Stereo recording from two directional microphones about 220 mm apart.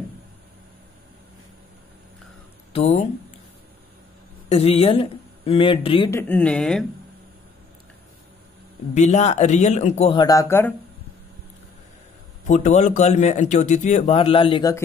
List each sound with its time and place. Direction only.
2.7 s speech: 30° left (ahead or behind)
4.5 s speech: 25° left (ahead or behind)
6.0 s speech: 10° left (ahead or behind)
8.9 s speech: 30° left (ahead or behind); by 10.7 s 15° left (ahead or behind)
12.4 s speech: 30° left (ahead or behind)